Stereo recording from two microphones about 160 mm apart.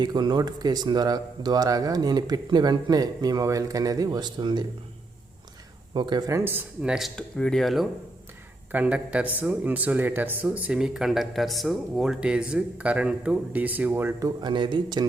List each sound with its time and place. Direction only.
0.0 s speech: 25° right (ahead or behind)
5.9 s speech: 30° right (ahead or behind)